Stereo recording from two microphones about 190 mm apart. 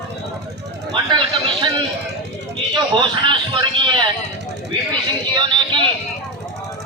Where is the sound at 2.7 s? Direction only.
25° right (ahead or behind).